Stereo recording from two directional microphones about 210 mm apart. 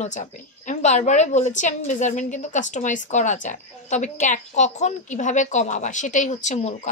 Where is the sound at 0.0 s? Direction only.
35° left (ahead or behind).